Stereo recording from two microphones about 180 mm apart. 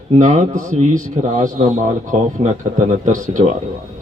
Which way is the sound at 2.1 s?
45° right (ahead or behind).